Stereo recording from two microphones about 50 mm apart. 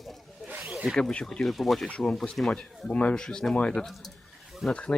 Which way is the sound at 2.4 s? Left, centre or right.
Centre.